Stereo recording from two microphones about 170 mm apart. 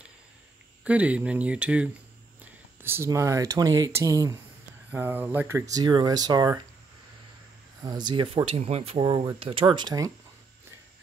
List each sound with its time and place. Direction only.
0.8 s speech: 5° right (ahead or behind); by 6.6 s 25° right (ahead or behind)
7.8 s speech: 25° right (ahead or behind)